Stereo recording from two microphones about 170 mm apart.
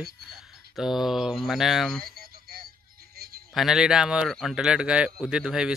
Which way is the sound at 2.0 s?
60° right (ahead or behind).